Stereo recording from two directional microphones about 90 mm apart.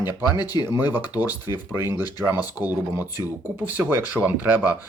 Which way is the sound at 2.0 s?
45° left (ahead or behind).